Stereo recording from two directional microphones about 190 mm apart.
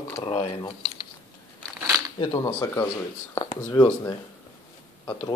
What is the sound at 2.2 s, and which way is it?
Speech, 20° left (ahead or behind).